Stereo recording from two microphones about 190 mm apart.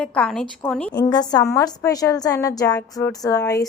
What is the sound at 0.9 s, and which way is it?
A woman's voice, 20° left (ahead or behind).